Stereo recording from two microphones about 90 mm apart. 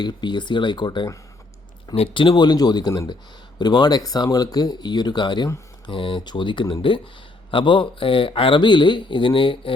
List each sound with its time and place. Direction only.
0.0 s speech: 55° left (ahead or behind)
2.0 s speech: 80° left; by 5.5 s 60° left (ahead or behind)
5.8 s speech: 70° left (ahead or behind)